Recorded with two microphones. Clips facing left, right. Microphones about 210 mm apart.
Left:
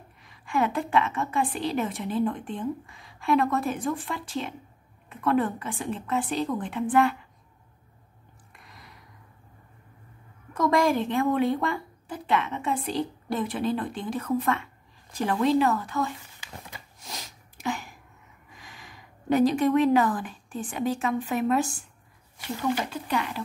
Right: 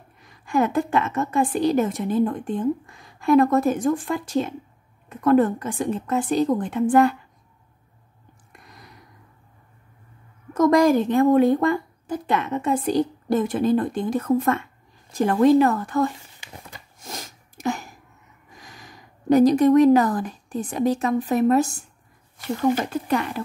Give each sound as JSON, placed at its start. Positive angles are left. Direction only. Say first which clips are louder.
{"t": 0.2, "sound": "a woman's voice", "louder": "right 5 dB", "side_deg": -45}
{"t": 8.6, "sound": "a sound", "louder": "right 3 dB", "side_deg": -45}
{"t": 10.5, "sound": "a woman's voice", "louder": "right 7 dB", "side_deg": -45}
{"t": 17.0, "sound": "sneeze", "louder": "right 6 dB", "side_deg": -50}
{"t": 18.5, "sound": "a woman's voice", "louder": "right 3 dB", "side_deg": -40}